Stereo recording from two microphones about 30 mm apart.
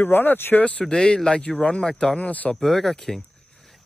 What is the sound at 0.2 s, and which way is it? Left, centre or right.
Speech, left.